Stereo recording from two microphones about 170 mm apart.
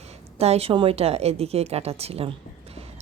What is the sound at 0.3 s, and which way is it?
Speech, 35° right (ahead or behind).